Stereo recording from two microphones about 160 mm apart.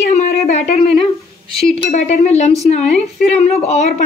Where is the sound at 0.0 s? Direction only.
45° left (ahead or behind).